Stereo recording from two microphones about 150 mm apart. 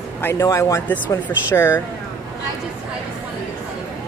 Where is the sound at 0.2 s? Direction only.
20° left (ahead or behind).